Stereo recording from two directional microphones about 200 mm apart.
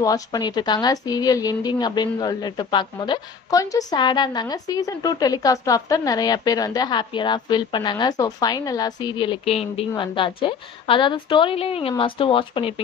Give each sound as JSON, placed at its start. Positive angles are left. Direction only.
{"t": 0.0, "sound": "speech", "side_deg": 20}